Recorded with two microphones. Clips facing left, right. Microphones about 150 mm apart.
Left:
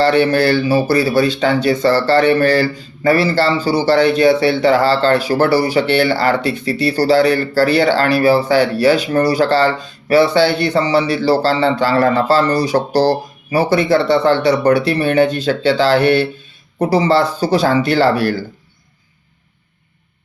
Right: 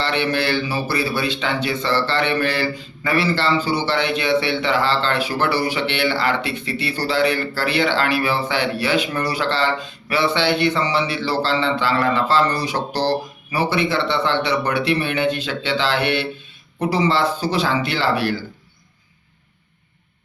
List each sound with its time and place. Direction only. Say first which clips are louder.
0.0 s speech: left 9 dB; 40° left (ahead or behind)